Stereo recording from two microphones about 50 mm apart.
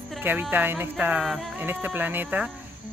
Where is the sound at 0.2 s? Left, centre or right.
Right.